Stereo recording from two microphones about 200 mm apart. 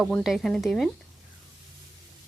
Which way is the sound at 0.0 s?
Centre (ahead or behind).